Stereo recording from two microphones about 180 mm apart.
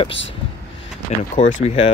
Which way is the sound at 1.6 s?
35° left (ahead or behind).